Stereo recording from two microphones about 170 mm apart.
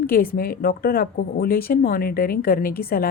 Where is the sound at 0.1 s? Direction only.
60° left (ahead or behind).